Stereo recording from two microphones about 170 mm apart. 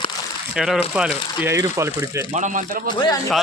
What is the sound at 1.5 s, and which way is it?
Speech, 15° right (ahead or behind).